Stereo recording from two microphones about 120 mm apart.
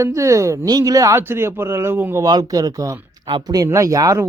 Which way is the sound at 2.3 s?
30° right (ahead or behind).